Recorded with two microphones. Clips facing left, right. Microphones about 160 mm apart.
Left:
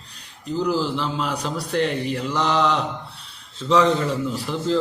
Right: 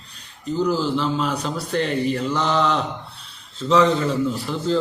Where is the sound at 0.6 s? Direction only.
10° left (ahead or behind).